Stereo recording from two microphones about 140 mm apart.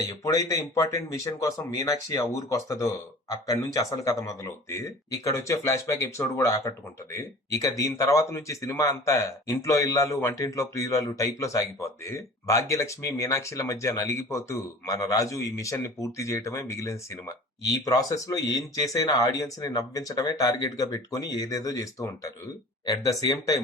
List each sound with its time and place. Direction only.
0.1 s speech: 25° left (ahead or behind)